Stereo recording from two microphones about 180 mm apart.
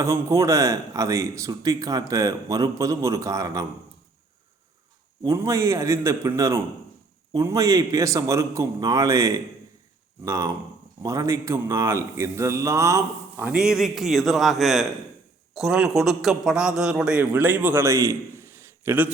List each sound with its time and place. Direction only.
0.0 s speech: 15° right (ahead or behind)
5.2 s a man's voice: 15° right (ahead or behind)